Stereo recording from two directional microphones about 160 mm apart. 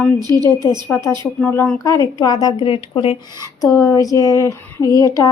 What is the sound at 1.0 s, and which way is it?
A woman's voice, 15° left (ahead or behind).